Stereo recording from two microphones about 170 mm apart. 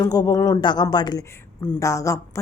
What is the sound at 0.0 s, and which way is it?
Speech, 20° left (ahead or behind).